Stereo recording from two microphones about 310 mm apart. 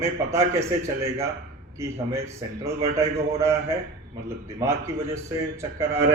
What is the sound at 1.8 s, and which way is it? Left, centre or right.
A man's voice, centre.